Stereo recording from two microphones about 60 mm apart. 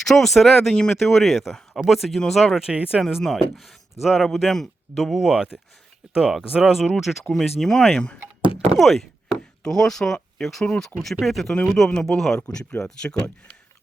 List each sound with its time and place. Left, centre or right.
0.0 s speech: centre
2.6 s speech: centre
3.0 s speech: centre
8.8 s speech: centre
11.5 s a man's voice: left
11.9 s speech: centre